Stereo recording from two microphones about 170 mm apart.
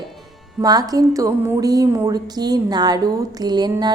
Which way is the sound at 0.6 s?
20° right (ahead or behind).